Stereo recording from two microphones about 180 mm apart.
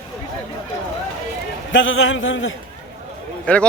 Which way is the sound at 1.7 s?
90° left.